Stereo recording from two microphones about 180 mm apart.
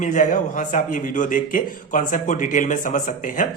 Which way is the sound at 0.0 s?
45° left (ahead or behind).